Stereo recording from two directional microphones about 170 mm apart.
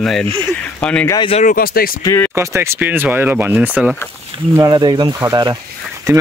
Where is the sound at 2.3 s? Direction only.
15° right (ahead or behind).